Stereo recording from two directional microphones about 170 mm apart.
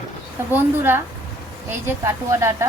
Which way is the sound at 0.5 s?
15° right (ahead or behind).